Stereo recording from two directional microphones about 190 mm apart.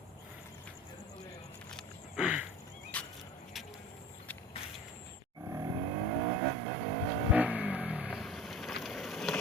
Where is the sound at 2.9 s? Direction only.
5° left (ahead or behind).